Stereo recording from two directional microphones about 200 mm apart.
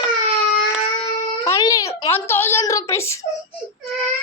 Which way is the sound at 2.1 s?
10° left (ahead or behind).